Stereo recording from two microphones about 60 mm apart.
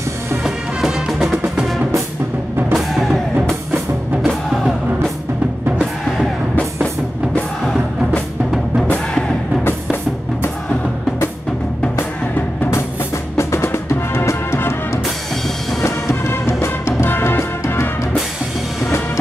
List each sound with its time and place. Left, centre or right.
0.4 s music: centre
2.7 s music: centre
13.4 s music: left